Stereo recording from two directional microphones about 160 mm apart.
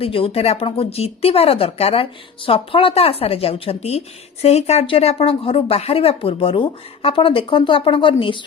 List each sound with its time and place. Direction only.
0.0 s speech: 35° left (ahead or behind)